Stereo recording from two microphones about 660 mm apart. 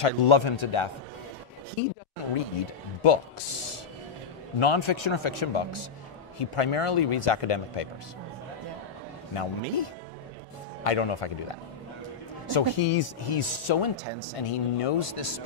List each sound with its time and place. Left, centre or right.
0.0 s speech: left
2.3 s speech: left
9.3 s speech: left